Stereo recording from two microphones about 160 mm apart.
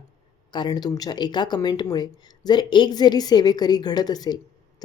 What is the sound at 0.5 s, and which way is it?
Speech, 25° left (ahead or behind).